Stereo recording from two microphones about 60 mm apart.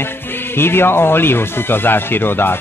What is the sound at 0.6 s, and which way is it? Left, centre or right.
Speech, left.